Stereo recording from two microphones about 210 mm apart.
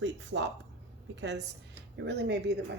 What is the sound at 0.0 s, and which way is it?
Speech, 60° right (ahead or behind).